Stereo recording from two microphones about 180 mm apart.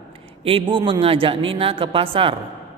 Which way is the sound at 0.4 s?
30° right (ahead or behind).